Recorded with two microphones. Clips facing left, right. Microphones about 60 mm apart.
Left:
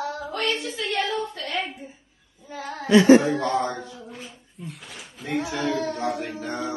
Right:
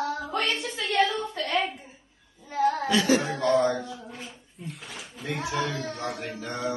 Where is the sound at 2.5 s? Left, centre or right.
Centre.